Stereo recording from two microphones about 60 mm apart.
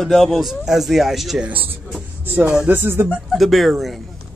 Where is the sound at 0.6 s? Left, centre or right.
Centre.